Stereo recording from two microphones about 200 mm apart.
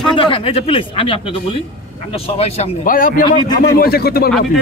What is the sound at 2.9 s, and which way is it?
Speech, 45° left (ahead or behind).